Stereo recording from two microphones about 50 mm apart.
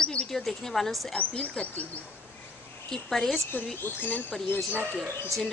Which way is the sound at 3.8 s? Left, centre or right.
Left.